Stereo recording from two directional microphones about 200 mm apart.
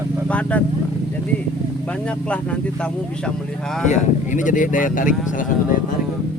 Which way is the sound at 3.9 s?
40° left (ahead or behind).